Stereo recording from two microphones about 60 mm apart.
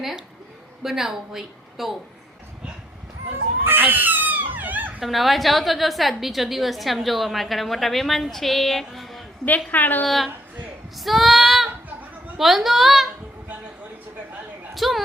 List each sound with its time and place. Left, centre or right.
0.8 s a woman's voice: centre
3.6 s cat: right
4.9 s a woman's voice: centre
9.6 s a woman's voice: left
10.1 s a woman's voice: centre
14.8 s a woman's voice: centre